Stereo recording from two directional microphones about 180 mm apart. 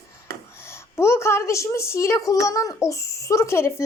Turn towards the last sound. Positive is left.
turn(degrees=15)  # may be behind; listen again after turning